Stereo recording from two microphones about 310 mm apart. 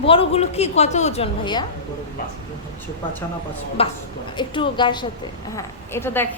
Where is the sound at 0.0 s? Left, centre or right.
Centre.